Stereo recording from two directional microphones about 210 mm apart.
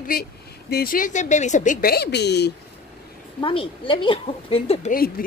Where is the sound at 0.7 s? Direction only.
45° left (ahead or behind).